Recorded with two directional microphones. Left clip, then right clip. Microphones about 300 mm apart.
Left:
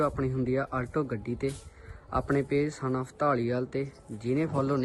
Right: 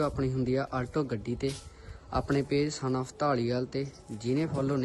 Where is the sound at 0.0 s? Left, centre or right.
Centre.